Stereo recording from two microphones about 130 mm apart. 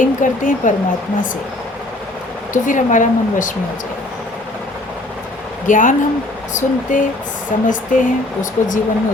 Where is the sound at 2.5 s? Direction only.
80° left.